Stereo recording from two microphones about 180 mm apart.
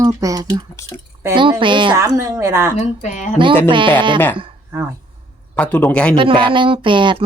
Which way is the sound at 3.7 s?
25° right (ahead or behind).